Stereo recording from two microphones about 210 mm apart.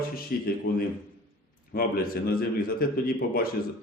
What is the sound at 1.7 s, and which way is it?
A man's voice, 45° left (ahead or behind).